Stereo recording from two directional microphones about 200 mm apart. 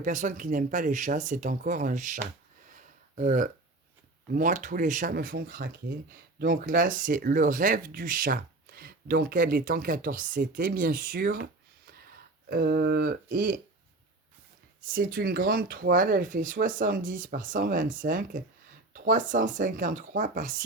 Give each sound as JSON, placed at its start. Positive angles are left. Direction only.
{"t": 0.0, "sound": "speech", "side_deg": -40}
{"t": 2.6, "sound": "a sound", "side_deg": -40}
{"t": 4.3, "sound": "speech", "side_deg": -45}
{"t": 12.5, "sound": "speech", "side_deg": -45}
{"t": 14.8, "sound": "speech", "side_deg": -45}